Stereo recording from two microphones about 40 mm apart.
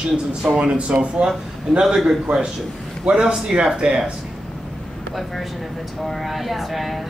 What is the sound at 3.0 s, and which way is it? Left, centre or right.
Speech, right.